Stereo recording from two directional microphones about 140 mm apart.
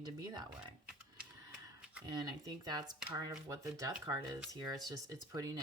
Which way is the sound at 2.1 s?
25° right (ahead or behind).